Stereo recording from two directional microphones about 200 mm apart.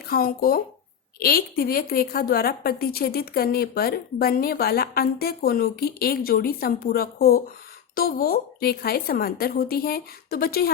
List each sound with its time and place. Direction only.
0.1 s a woman's voice: 45° left (ahead or behind)